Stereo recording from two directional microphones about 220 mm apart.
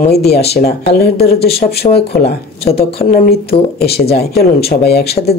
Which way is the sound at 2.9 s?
40° left (ahead or behind).